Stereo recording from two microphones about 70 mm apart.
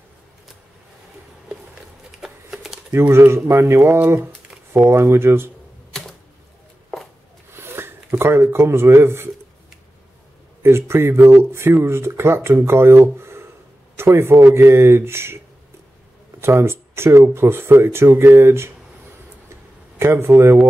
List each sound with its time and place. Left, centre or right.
2.2 s a sound: centre
2.9 s speech: right
7.5 s speech: right
10.6 s speech: right
16.3 s speech: right
20.0 s speech: right